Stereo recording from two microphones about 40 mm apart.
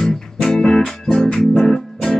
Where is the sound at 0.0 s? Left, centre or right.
Centre.